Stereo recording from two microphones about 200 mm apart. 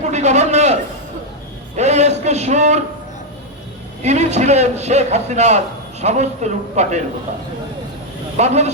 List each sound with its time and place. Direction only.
0.0 s a sound: 35° right (ahead or behind)
4.0 s a man's voice: 35° right (ahead or behind)
8.4 s a man's voice: 35° right (ahead or behind)